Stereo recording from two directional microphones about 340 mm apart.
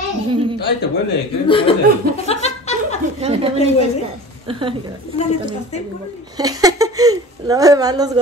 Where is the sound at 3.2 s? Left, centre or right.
Centre.